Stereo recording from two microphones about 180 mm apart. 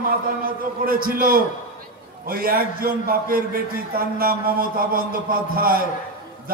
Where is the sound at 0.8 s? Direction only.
55° right (ahead or behind).